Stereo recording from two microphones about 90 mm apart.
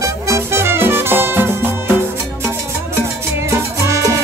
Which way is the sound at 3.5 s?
35° right (ahead or behind).